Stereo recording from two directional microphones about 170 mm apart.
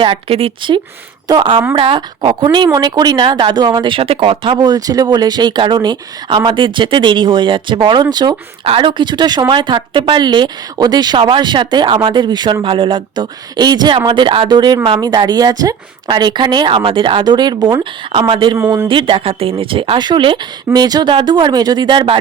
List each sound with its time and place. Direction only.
0.0 s speech: 35° right (ahead or behind)